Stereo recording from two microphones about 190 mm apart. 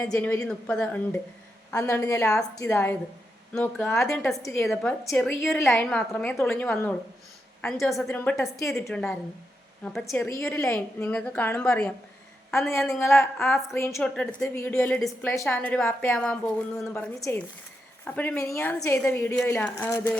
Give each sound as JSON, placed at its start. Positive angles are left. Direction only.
{"t": 0.0, "sound": "a woman's voice", "side_deg": 10}
{"t": 8.9, "sound": "a woman's voice", "side_deg": 0}
{"t": 10.1, "sound": "a woman's voice", "side_deg": 15}
{"t": 13.7, "sound": "a woman's voice", "side_deg": 15}